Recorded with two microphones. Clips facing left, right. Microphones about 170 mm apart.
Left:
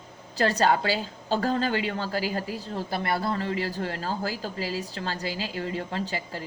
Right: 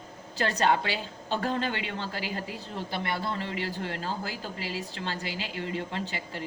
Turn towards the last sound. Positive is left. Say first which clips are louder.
# left 3 dB
turn(degrees=35)  # may be behind; listen again after turning